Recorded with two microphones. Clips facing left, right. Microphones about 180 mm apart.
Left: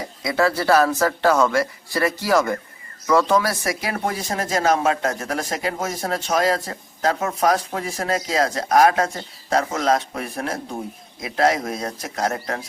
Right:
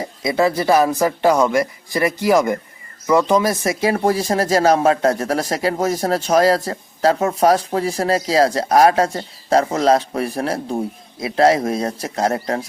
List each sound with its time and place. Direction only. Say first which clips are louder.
0.0 s speech: right 3 dB; 20° right (ahead or behind)